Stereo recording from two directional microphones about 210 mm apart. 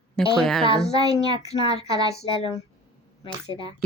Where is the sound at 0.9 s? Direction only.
20° right (ahead or behind).